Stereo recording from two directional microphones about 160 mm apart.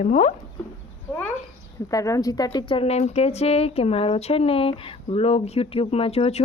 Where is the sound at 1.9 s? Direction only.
20° left (ahead or behind).